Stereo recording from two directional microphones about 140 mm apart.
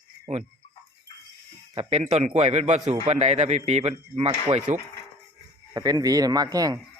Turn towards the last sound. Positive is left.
turn(degrees=-25)  # may be behind; listen again after turning